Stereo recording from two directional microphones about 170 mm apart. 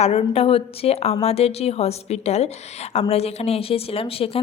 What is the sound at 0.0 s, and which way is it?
A woman's voice, 35° left (ahead or behind).